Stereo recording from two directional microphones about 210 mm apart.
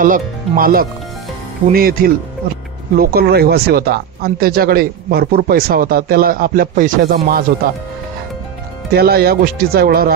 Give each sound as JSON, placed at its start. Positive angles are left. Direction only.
{"t": 0.0, "sound": "speech", "side_deg": -40}
{"t": 8.9, "sound": "speech", "side_deg": -45}